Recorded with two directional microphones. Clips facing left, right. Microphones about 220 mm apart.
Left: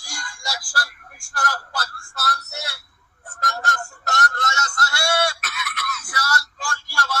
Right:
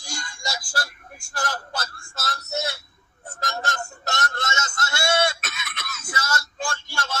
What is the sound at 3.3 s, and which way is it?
Music, 25° right (ahead or behind).